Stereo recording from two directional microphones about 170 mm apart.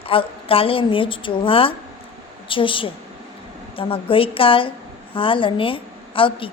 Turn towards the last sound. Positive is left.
turn(degrees=30)  # may be behind; listen again after turning